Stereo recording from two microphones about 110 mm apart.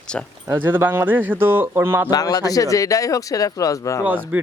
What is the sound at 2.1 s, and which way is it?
Speech, 35° left (ahead or behind).